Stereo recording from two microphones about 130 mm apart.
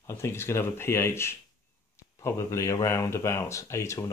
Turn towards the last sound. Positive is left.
turn(degrees=20)  # may be behind; listen again after turning